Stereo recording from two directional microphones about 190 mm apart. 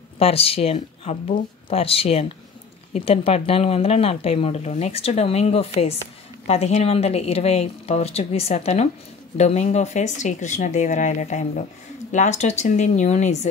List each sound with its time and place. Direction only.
0.2 s a woman's voice: 30° left (ahead or behind)